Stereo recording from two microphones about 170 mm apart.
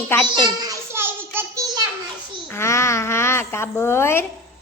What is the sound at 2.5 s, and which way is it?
A woman's voice, 15° left (ahead or behind).